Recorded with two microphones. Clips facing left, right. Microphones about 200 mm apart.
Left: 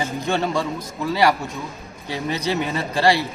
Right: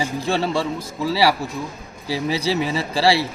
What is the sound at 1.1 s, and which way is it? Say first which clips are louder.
Speech: even; 5° right (ahead or behind).